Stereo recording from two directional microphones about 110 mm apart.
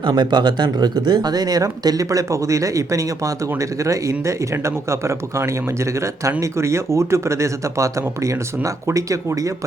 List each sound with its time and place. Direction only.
0.0 s speech: 40° right (ahead or behind)